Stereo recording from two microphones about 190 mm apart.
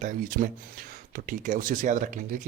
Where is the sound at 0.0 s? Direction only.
45° right (ahead or behind).